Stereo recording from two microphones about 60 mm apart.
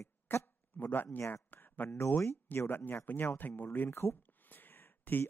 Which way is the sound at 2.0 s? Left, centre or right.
Left.